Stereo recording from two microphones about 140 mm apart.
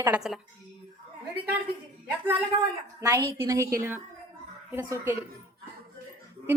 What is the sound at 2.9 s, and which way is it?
A woman's voice, 20° right (ahead or behind).